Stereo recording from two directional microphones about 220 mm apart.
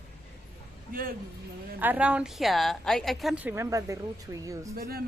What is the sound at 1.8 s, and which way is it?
A woman's voice, 5° right (ahead or behind).